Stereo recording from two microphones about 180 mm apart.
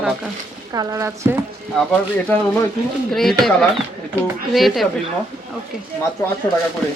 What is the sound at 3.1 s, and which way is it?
Speech, centre (ahead or behind).